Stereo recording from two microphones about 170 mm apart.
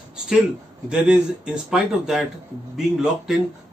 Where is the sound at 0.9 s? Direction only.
5° right (ahead or behind).